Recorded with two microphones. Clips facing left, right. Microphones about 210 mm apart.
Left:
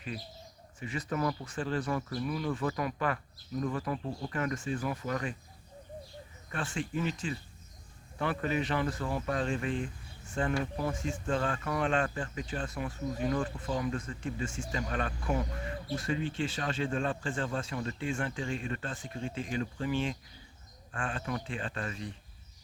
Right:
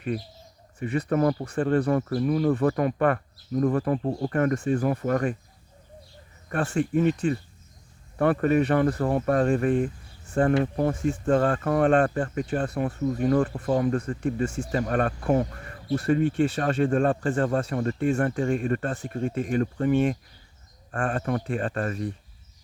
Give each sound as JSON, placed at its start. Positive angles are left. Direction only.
{"t": 0.8, "sound": "speech", "side_deg": -60}
{"t": 6.7, "sound": "speech", "side_deg": -50}
{"t": 8.2, "sound": "speech", "side_deg": -55}